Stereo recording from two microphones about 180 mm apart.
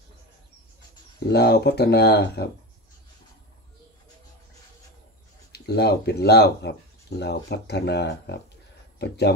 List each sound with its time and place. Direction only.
1.2 s speech: 65° left (ahead or behind)
5.5 s speech: 65° left (ahead or behind)